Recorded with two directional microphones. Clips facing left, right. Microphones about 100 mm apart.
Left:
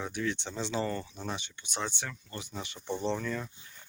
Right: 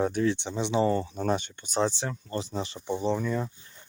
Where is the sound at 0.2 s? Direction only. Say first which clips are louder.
Right 7 dB; 25° right (ahead or behind).